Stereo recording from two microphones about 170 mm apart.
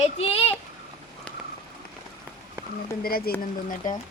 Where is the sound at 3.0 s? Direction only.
60° left (ahead or behind).